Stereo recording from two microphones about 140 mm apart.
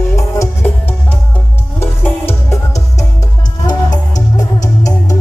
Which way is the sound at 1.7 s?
15° left (ahead or behind).